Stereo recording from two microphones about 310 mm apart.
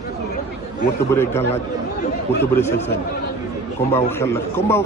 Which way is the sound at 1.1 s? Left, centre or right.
Centre.